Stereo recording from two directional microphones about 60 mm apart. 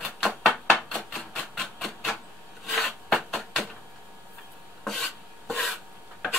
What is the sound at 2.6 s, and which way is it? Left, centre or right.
Rub, centre.